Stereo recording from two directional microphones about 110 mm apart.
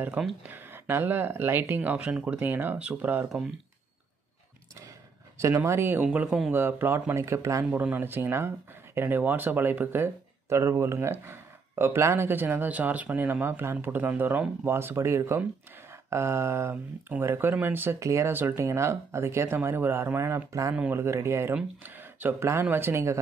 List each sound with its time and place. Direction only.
0.4 s speech: 20° right (ahead or behind)
5.4 s speech: 25° right (ahead or behind)
6.0 s speech: 10° right (ahead or behind)
6.5 s speech: 20° right (ahead or behind)
15.9 s a sound: 25° right (ahead or behind)
17.1 s speech: 20° right (ahead or behind)